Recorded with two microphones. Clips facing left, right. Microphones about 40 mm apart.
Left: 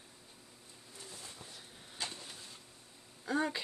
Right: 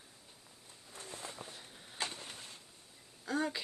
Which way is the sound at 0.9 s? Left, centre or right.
Right.